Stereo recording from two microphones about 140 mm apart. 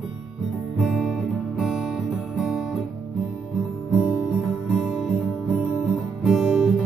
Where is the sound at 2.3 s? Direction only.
5° right (ahead or behind).